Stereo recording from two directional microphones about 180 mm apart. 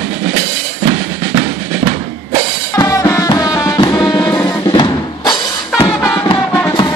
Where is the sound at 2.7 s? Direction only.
20° left (ahead or behind).